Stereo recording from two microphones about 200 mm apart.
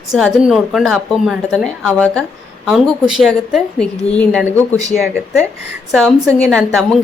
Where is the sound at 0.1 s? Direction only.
Centre (ahead or behind).